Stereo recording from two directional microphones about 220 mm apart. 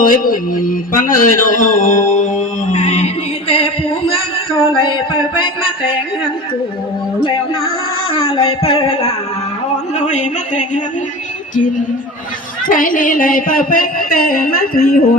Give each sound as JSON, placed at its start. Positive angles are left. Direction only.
{"t": 0.0, "sound": "speech", "side_deg": 40}
{"t": 3.5, "sound": "music", "side_deg": 25}
{"t": 4.8, "sound": "a sound", "side_deg": 20}
{"t": 8.1, "sound": "a sound", "side_deg": 25}
{"t": 10.0, "sound": "speech", "side_deg": 30}
{"t": 12.6, "sound": "speech", "side_deg": 40}